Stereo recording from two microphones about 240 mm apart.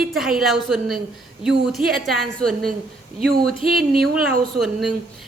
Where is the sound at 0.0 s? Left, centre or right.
Centre.